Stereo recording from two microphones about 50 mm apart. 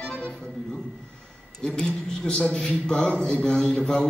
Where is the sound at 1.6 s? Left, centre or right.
Centre.